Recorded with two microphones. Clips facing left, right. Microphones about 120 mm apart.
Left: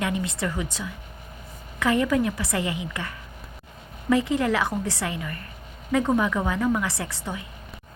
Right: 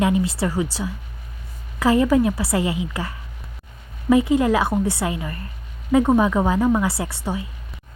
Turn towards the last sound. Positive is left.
turn(degrees=-25)  # may be behind; listen again after turning